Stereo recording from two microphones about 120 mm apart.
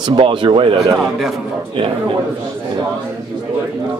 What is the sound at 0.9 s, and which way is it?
Speech, 5° right (ahead or behind).